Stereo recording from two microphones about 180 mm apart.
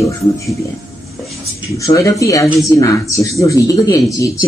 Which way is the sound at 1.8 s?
15° left (ahead or behind).